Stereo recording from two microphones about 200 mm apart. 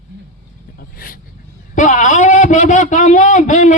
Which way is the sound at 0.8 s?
45° left (ahead or behind).